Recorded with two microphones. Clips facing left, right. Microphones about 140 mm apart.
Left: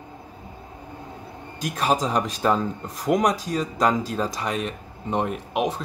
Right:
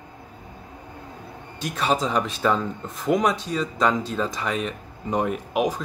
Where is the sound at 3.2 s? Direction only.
40° left (ahead or behind).